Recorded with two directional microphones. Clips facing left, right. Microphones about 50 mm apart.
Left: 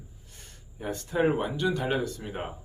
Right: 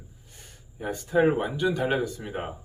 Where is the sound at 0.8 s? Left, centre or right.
Centre.